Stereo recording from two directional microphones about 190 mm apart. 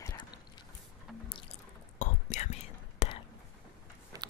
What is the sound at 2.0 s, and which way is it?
Whispering, 40° left (ahead or behind).